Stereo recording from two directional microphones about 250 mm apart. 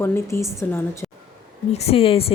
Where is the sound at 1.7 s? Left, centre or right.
Left.